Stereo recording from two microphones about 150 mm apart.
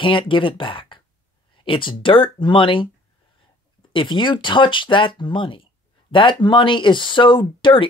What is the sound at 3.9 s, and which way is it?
Speech, 30° left (ahead or behind).